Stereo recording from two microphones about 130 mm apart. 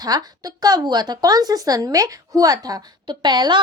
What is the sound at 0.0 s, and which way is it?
A woman's voice, 30° right (ahead or behind).